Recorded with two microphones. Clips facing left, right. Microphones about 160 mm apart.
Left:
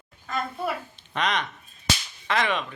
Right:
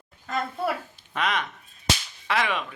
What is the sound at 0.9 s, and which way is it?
A child's voice, 5° right (ahead or behind).